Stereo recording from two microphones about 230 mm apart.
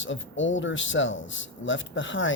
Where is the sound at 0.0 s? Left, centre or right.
Left.